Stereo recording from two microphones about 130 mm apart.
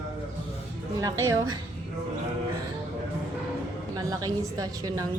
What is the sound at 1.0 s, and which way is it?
Speech, 25° right (ahead or behind).